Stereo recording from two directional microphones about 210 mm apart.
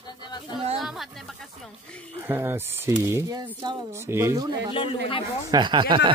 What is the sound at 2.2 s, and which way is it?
Speech, 10° right (ahead or behind).